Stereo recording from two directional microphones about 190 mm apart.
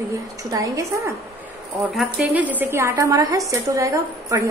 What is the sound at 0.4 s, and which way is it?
Speech, 15° right (ahead or behind).